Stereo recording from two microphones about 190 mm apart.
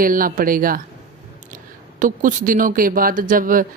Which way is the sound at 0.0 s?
45° right (ahead or behind).